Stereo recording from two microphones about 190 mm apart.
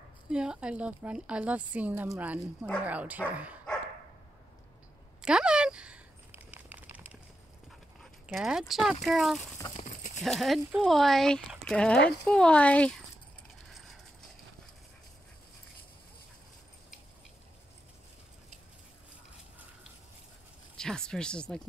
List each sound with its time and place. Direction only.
0.3 s speech: 5° right (ahead or behind)
5.2 s a sound: 5° right (ahead or behind)
8.0 s speech: centre (ahead or behind)
9.8 s clip-clop: 40° left (ahead or behind)
10.2 s speech: centre (ahead or behind)
20.7 s speech: 5° left (ahead or behind)